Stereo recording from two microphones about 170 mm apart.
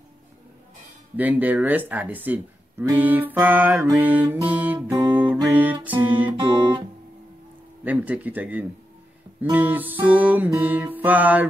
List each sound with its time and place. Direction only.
1.1 s speech: 10° right (ahead or behind)
5.1 s music: 10° right (ahead or behind)
6.3 s guitar: 25° right (ahead or behind)
7.8 s speech: 10° right (ahead or behind)